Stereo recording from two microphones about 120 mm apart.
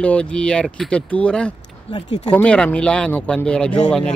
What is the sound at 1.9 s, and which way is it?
Speech, 45° left (ahead or behind).